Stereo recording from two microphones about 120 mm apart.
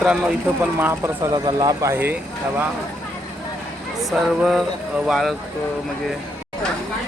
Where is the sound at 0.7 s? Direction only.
20° right (ahead or behind).